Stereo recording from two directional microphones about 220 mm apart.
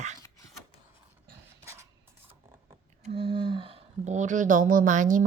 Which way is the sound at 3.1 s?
25° right (ahead or behind).